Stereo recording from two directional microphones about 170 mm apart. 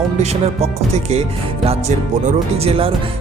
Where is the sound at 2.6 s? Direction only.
35° right (ahead or behind).